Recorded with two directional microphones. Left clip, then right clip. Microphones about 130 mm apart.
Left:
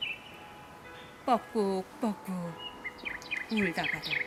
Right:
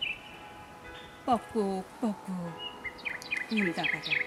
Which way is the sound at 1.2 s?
30° left (ahead or behind).